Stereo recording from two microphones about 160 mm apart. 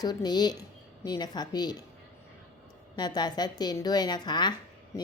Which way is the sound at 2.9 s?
25° left (ahead or behind).